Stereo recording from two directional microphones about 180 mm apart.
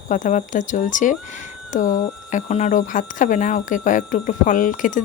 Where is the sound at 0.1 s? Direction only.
45° left (ahead or behind).